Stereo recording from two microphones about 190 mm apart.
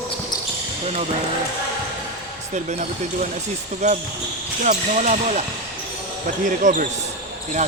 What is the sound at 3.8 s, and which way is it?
Speech, 35° right (ahead or behind).